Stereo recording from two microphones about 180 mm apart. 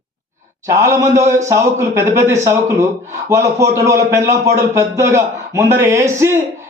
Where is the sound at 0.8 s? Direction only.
15° right (ahead or behind).